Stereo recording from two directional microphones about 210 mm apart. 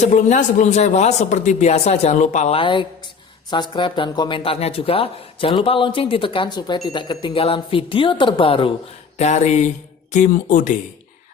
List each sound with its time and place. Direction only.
0.0 s a man's voice: 35° left (ahead or behind)